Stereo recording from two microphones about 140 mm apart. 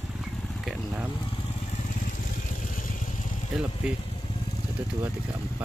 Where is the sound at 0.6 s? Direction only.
5° right (ahead or behind).